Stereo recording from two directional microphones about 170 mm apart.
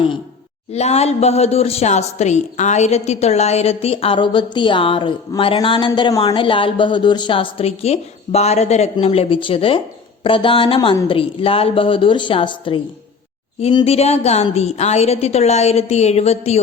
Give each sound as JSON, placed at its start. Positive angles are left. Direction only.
{"t": 0.7, "sound": "a woman's voice", "side_deg": 40}